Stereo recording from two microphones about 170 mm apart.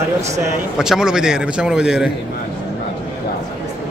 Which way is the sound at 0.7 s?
5° right (ahead or behind).